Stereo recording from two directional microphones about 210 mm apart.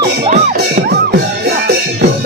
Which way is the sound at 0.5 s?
50° right (ahead or behind).